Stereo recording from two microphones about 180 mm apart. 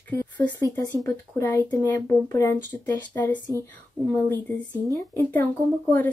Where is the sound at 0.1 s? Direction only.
10° left (ahead or behind).